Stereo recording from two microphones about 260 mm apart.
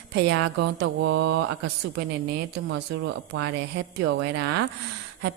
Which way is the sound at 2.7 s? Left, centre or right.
Right.